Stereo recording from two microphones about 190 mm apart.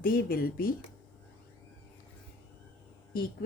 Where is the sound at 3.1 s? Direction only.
50° left (ahead or behind).